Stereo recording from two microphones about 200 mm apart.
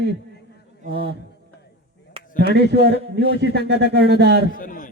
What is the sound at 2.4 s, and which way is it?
Speech, 55° right (ahead or behind).